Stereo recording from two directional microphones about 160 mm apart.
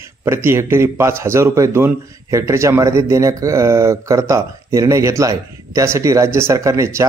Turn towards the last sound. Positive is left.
turn(degrees=-15)  # may be behind; listen again after turning